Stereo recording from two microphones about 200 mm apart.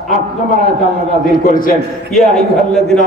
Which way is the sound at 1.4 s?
45° left (ahead or behind).